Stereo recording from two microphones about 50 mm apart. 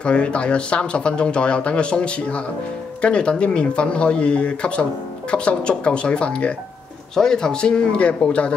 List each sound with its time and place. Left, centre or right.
0.0 s speech: left